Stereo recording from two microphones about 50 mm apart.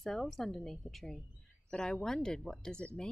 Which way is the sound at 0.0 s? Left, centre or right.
Centre.